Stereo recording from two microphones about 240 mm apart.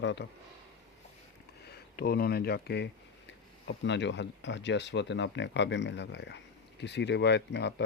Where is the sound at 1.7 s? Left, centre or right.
Left.